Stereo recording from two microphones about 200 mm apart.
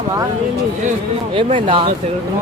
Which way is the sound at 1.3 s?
25° right (ahead or behind).